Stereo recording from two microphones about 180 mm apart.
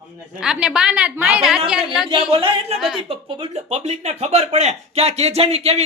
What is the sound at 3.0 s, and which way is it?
Speech, 30° right (ahead or behind).